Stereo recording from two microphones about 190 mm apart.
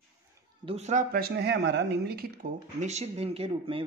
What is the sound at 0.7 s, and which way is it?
Speech, 35° right (ahead or behind).